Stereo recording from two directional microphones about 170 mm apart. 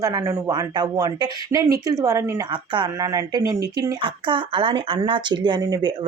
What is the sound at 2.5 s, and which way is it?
Speech, 25° right (ahead or behind).